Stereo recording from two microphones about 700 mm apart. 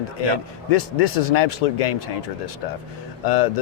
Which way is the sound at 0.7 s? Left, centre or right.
Left.